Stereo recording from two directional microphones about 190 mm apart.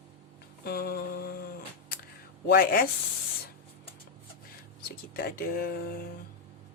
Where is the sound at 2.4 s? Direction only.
50° left (ahead or behind).